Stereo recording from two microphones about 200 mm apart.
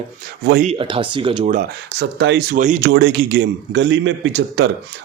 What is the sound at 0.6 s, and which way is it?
Speech, 30° right (ahead or behind).